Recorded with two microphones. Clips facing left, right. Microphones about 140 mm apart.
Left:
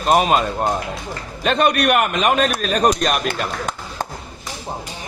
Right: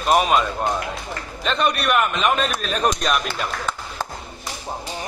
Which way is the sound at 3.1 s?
50° left (ahead or behind).